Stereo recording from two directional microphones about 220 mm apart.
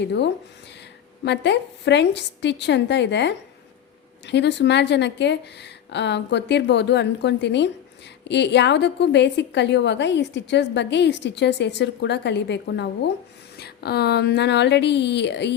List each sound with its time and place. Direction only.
0.0 s a woman's voice: 50° left (ahead or behind)